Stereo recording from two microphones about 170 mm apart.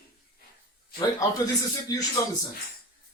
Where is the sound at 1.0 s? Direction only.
20° left (ahead or behind).